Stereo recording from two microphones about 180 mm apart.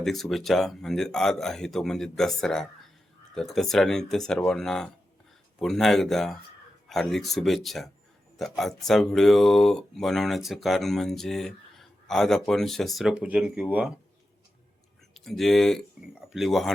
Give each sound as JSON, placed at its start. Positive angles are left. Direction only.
{"t": 0.0, "sound": "speech", "side_deg": 0}
{"t": 15.1, "sound": "speech", "side_deg": 0}